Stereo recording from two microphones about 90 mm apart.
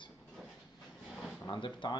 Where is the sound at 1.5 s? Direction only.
60° left (ahead or behind).